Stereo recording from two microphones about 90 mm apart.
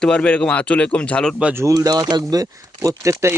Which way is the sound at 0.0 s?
10° left (ahead or behind).